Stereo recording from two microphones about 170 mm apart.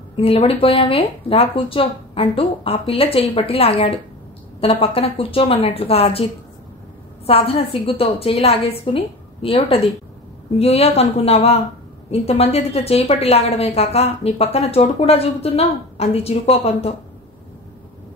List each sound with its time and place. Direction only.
0.1 s a woman's voice: 35° left (ahead or behind)
7.2 s a woman's voice: 35° left (ahead or behind)